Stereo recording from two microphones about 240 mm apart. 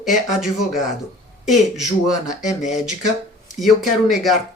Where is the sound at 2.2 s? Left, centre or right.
Left.